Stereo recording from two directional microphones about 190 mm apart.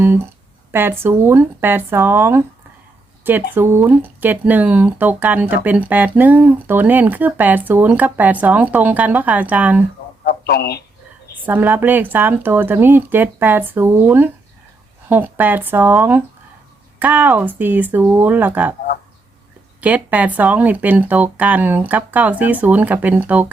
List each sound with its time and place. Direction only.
0.7 s speech: 10° right (ahead or behind)
10.2 s speech: 55° left (ahead or behind)
11.4 s speech: 10° right (ahead or behind)
19.8 s speech: 10° right (ahead or behind)